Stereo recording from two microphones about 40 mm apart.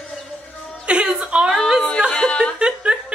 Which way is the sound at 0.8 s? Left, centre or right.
Right.